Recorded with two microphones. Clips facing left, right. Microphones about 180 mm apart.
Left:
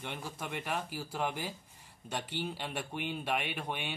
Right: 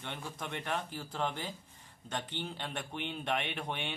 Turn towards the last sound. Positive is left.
turn(degrees=5)  # may be behind; listen again after turning